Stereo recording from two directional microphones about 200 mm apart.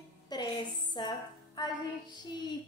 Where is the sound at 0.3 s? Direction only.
20° left (ahead or behind).